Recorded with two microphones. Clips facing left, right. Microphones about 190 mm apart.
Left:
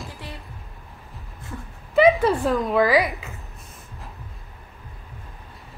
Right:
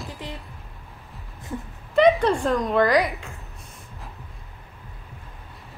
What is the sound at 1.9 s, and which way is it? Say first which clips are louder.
Speech: left 1 dB; 5° left (ahead or behind).